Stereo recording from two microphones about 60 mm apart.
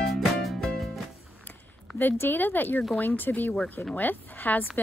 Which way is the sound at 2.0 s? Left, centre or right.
Left.